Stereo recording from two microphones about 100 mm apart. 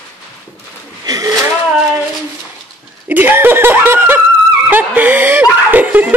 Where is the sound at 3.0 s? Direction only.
20° right (ahead or behind).